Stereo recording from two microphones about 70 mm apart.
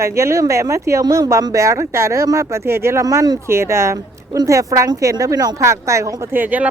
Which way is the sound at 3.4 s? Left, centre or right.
Right.